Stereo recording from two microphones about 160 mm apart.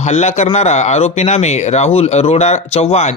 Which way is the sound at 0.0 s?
45° left (ahead or behind).